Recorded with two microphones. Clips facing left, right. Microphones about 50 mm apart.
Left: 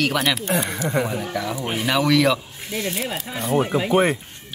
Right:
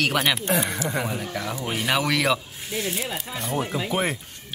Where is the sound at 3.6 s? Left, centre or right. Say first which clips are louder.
Left 6 dB; left.